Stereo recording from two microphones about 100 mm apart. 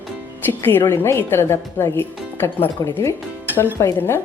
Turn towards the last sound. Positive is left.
turn(degrees=25)  # may be behind; listen again after turning